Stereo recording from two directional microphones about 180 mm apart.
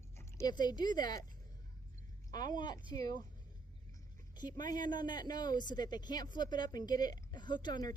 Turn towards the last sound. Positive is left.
turn(degrees=20)  # may be behind; listen again after turning